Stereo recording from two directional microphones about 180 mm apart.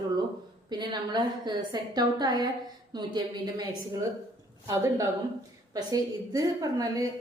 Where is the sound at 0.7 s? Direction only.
25° right (ahead or behind).